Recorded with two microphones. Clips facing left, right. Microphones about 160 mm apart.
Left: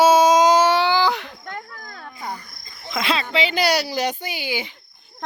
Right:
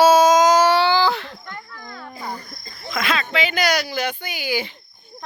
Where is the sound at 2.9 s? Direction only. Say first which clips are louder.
Left 1 dB; 30° left (ahead or behind).